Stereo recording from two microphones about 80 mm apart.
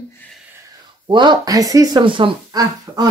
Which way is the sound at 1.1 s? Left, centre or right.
Right.